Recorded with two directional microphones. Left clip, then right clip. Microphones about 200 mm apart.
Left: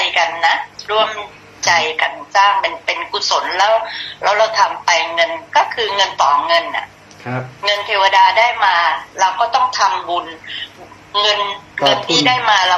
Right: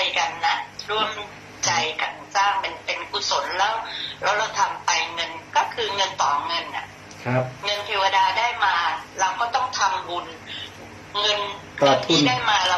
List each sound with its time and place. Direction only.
0.0 s a sound: 30° left (ahead or behind)
1.6 s speech: 30° left (ahead or behind)
7.3 s a man's voice: 5° left (ahead or behind)
7.6 s a woman's voice: 30° left (ahead or behind)